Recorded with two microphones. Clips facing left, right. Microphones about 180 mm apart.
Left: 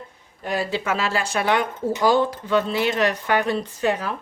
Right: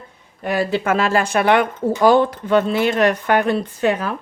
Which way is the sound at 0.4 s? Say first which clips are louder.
Right 5 dB; 60° right (ahead or behind).